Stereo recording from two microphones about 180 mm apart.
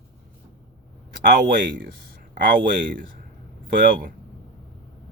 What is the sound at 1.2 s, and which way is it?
Speech, 50° right (ahead or behind).